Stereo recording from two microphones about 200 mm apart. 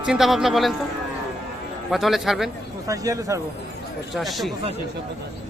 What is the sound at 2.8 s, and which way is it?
Speech, 15° right (ahead or behind).